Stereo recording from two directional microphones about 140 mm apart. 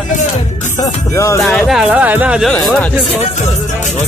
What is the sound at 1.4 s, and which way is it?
Speech, centre (ahead or behind).